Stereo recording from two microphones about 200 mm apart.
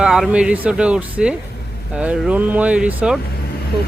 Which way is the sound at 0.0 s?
Centre (ahead or behind).